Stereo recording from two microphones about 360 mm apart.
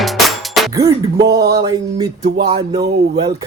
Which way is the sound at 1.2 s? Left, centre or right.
Right.